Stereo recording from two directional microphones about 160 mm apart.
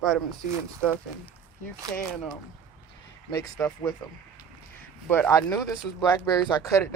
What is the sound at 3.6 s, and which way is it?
Speech, 10° left (ahead or behind).